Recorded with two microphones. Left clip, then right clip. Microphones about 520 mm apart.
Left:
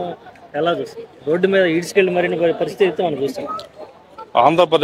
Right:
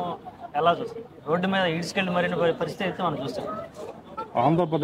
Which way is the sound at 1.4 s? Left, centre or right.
Right.